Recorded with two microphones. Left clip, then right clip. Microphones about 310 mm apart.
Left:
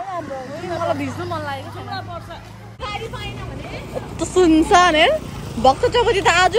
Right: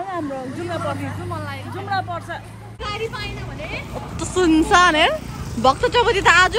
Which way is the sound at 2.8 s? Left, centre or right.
Centre.